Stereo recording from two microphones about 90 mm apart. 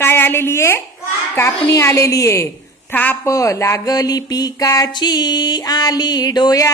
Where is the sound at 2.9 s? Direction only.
20° left (ahead or behind).